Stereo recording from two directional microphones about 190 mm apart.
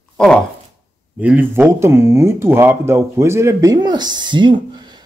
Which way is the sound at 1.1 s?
5° right (ahead or behind).